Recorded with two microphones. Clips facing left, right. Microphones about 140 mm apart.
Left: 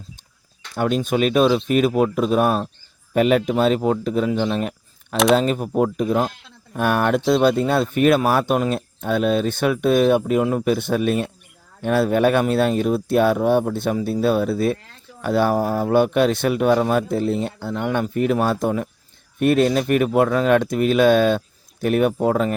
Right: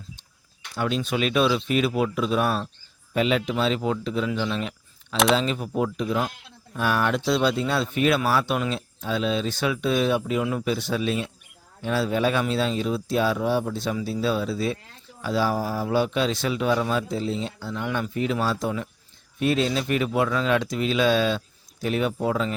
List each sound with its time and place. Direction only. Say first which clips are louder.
0.8 s speech: left 6 dB; 50° left (ahead or behind)
9.0 s speech: left 6 dB; 55° left (ahead or behind)